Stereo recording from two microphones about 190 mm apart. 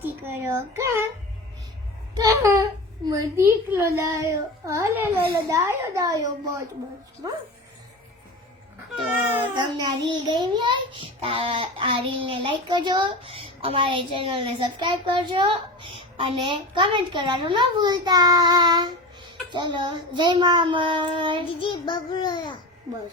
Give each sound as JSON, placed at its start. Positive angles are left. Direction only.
{"t": 0.0, "sound": "a sound", "side_deg": -10}
{"t": 0.8, "sound": "a child's voice", "side_deg": -15}
{"t": 2.1, "sound": "a child's voice", "side_deg": -15}
{"t": 9.6, "sound": "child singing", "side_deg": -20}
{"t": 21.6, "sound": "child singing", "side_deg": 25}